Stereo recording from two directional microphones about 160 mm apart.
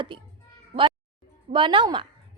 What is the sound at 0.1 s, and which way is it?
Speech, 30° right (ahead or behind).